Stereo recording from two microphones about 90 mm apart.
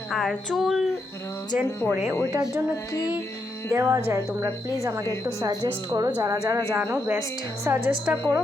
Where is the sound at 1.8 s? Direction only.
25° left (ahead or behind).